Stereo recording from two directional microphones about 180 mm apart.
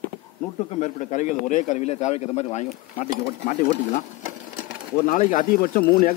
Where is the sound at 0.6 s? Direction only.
40° left (ahead or behind).